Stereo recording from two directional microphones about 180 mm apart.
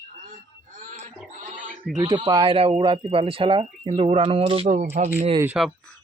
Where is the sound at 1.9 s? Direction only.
25° right (ahead or behind).